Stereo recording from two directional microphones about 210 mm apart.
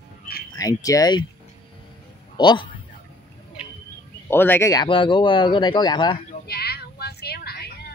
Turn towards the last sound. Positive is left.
turn(degrees=50)  # may be behind; listen again after turning